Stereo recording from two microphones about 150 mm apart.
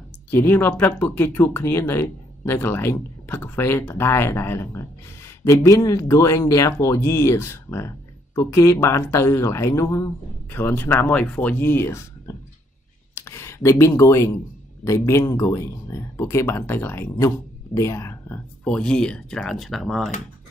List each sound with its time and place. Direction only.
0.3 s speech: 15° left (ahead or behind)
18.6 s speech: 5° left (ahead or behind)